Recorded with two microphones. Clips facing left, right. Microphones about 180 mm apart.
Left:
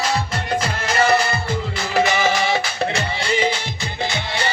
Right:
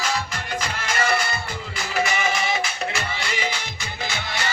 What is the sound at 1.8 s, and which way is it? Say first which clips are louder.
Music: left 5 dB; 35° left (ahead or behind).